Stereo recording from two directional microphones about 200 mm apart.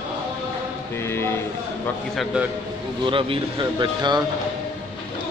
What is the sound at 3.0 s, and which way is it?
Speech, 25° right (ahead or behind).